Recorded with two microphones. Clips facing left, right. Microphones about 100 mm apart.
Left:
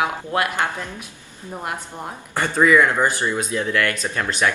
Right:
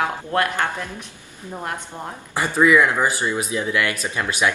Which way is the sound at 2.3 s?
10° right (ahead or behind).